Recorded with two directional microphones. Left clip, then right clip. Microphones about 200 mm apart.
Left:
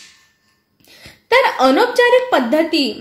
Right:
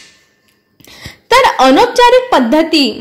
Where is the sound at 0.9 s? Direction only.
40° right (ahead or behind).